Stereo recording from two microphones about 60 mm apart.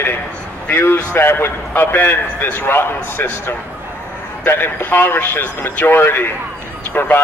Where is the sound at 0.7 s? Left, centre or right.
Left.